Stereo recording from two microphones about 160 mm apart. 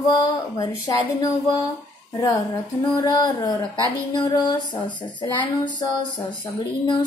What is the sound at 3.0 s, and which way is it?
A woman's voice, 25° left (ahead or behind).